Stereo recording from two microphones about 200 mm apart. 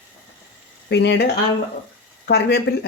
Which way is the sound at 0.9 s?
60° left (ahead or behind).